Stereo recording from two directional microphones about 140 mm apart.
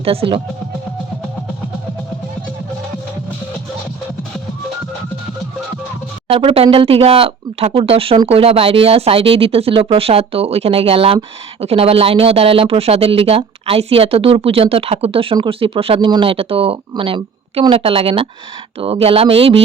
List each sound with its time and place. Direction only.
0.0 s speech: 45° right (ahead or behind)
6.2 s a woman's voice: 45° right (ahead or behind)